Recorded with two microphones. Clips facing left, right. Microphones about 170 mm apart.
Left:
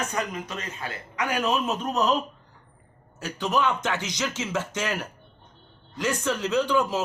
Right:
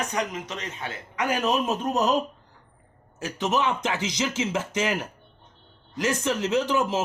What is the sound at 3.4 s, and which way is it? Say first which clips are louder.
Speech: even; 25° right (ahead or behind).